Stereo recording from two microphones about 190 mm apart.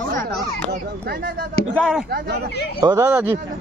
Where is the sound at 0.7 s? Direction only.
50° right (ahead or behind).